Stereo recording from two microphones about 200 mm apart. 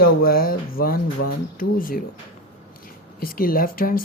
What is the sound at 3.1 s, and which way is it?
Speech, 45° left (ahead or behind).